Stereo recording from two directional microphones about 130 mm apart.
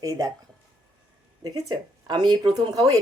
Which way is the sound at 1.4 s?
30° right (ahead or behind).